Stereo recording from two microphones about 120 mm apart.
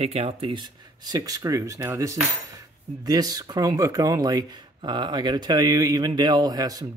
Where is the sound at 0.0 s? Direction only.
55° right (ahead or behind).